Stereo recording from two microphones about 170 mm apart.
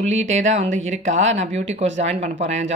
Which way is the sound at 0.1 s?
40° right (ahead or behind).